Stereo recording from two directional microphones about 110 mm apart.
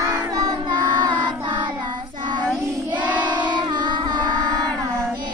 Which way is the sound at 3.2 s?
45° right (ahead or behind).